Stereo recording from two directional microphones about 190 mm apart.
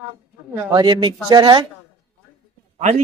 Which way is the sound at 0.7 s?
20° right (ahead or behind).